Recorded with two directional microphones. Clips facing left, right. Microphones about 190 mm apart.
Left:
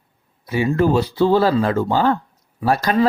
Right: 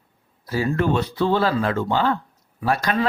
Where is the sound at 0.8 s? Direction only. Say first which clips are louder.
Left 6 dB; 35° left (ahead or behind).